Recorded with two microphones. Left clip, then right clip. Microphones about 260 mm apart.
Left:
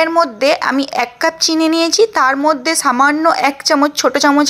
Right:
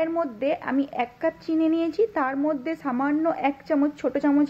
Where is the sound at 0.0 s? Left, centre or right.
Centre.